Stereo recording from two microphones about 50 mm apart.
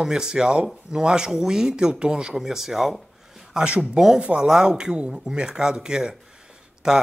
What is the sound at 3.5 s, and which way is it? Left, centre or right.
Speech, centre.